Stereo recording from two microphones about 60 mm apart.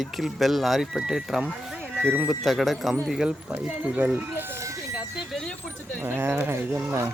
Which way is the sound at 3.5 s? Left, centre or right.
Right.